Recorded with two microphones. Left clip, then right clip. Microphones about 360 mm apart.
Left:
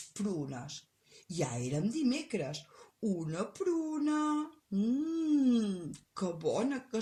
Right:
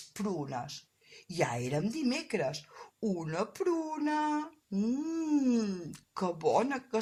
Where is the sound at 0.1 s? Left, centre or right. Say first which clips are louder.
Right 3 dB; centre.